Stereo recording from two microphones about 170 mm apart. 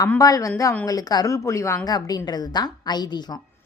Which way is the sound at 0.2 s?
20° left (ahead or behind).